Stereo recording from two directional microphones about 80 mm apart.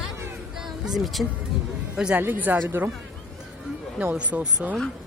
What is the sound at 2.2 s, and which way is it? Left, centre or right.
Speech, right.